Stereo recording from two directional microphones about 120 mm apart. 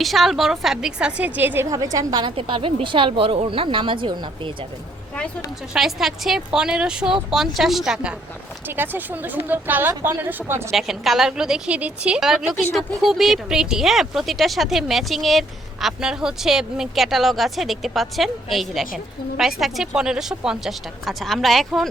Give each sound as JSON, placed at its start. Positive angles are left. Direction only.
{"t": 0.0, "sound": "a woman's voice", "side_deg": 0}
{"t": 1.7, "sound": "a woman's voice", "side_deg": -30}
{"t": 2.3, "sound": "a woman's voice", "side_deg": -50}
{"t": 5.7, "sound": "a woman's voice", "side_deg": -5}
{"t": 8.7, "sound": "speech", "side_deg": -15}
{"t": 10.7, "sound": "a woman's voice", "side_deg": 0}